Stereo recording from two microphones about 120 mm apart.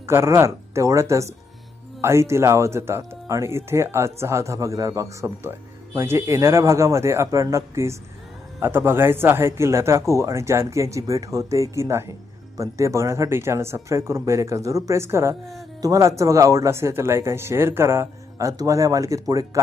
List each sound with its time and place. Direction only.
0.0 s speech: 20° right (ahead or behind)